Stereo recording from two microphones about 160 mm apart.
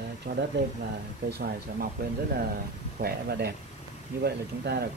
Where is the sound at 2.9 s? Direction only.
80° right.